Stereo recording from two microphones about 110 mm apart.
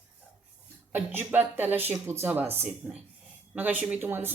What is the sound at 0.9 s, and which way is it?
Speech, 15° right (ahead or behind).